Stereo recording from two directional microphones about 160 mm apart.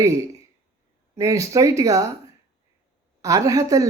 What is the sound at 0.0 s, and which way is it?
Speech, 20° right (ahead or behind).